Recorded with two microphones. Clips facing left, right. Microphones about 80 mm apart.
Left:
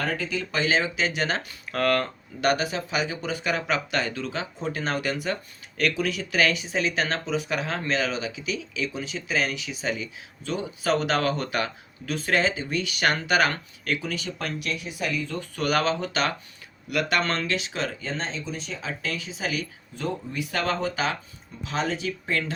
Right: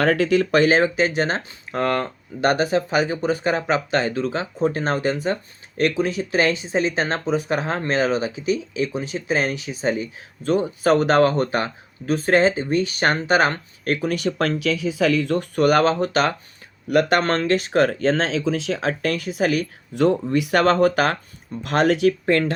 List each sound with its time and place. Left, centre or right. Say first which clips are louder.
0.0 s speech: right 11 dB; right
0.6 s speech: right 7 dB; right
15.0 s speech: right 10 dB; right
15.4 s speech: right 6 dB; right
18.0 s speech: right 12 dB; right
19.9 s speech: right 14 dB; right